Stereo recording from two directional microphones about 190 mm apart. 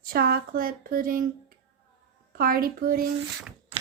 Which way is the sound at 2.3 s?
50° right (ahead or behind).